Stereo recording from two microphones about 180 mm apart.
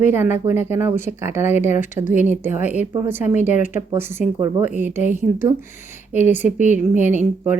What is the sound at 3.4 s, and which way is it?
Speech, 45° left (ahead or behind).